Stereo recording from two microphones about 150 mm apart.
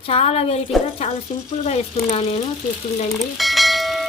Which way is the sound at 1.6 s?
45° left (ahead or behind).